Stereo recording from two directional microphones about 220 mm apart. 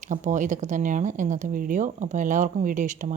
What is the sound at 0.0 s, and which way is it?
Speech, 35° right (ahead or behind).